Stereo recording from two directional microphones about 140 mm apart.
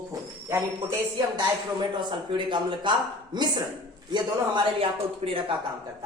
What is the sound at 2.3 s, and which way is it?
A man's voice, 35° right (ahead or behind).